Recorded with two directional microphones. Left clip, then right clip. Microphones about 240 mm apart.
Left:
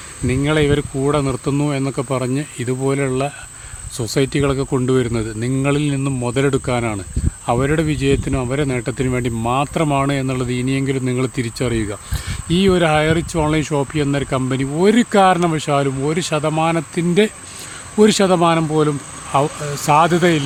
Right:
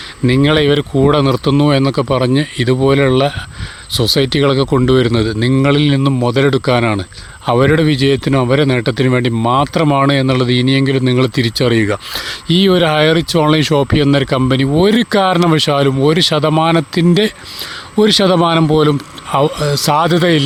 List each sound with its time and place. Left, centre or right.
0.3 s speech: right